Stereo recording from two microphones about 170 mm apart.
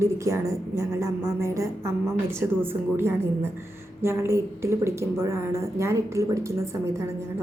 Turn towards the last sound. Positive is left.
turn(degrees=-15)  # may be behind; listen again after turning